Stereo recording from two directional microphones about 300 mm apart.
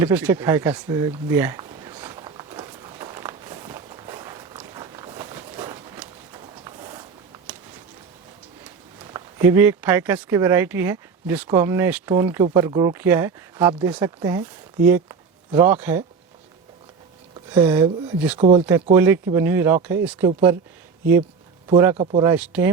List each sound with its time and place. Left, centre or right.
0.0 s a sound: centre
9.0 s speech: centre
17.3 s speech: centre
18.3 s speech: right
18.9 s speech: centre
21.7 s speech: centre
21.9 s speech: centre